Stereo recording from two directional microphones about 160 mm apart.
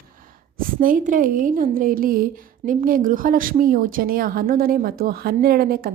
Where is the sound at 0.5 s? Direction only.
60° right (ahead or behind).